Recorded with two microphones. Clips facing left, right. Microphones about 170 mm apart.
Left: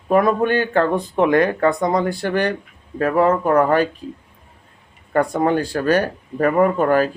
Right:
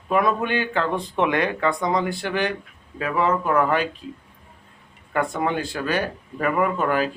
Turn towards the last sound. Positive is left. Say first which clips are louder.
# left 6 dB
turn(degrees=45)  # may be behind; listen again after turning